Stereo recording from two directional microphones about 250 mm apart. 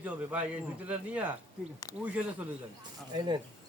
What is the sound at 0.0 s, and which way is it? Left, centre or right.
Speech, centre.